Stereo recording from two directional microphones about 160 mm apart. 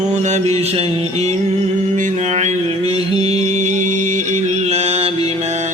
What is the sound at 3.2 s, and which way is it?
Music, 40° right (ahead or behind).